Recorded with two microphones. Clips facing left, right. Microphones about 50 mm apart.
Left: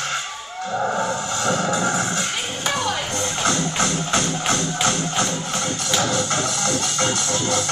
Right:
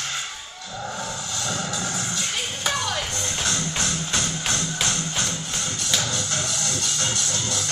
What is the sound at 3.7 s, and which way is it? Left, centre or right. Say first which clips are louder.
Music: left 5 dB; left.